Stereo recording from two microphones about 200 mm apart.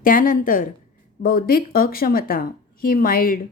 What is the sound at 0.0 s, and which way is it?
A woman's voice, 45° left (ahead or behind).